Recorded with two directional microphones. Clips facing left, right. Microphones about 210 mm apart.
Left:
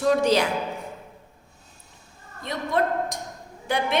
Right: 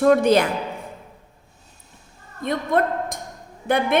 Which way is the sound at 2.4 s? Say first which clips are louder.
Right 8 dB; 50° right (ahead or behind).